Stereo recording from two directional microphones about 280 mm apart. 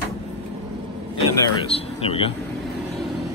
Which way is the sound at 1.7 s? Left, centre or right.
Centre.